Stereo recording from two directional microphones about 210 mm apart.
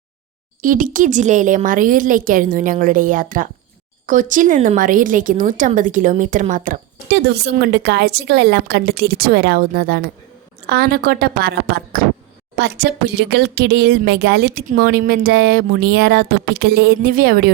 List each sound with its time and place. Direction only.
0.6 s speech: 40° right (ahead or behind)
12.5 s speech: 50° right (ahead or behind)